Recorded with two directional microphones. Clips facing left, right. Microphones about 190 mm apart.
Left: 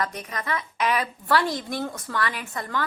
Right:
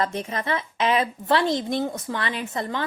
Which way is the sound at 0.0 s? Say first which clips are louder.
Right 4 dB; 25° right (ahead or behind).